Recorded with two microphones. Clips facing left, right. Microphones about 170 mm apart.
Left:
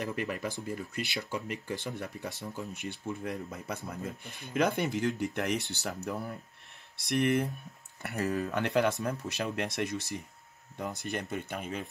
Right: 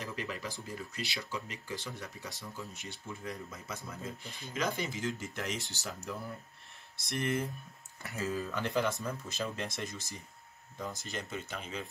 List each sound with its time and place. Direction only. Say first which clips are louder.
0.0 s speech: left 6 dB; 55° left (ahead or behind)